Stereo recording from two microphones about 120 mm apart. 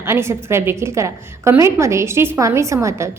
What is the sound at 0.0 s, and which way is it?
A woman's voice, 20° right (ahead or behind).